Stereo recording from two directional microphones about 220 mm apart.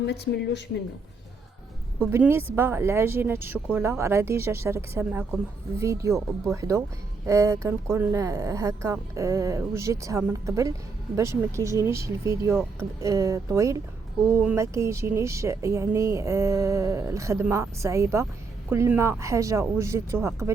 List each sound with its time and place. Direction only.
0.0 s a woman's voice: 50° left (ahead or behind)
2.0 s speech: 10° right (ahead or behind)